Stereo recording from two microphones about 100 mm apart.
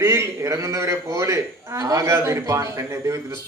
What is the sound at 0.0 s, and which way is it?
A man's voice, 30° right (ahead or behind).